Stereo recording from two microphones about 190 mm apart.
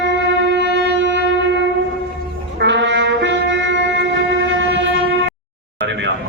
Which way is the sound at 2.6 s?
65° right (ahead or behind).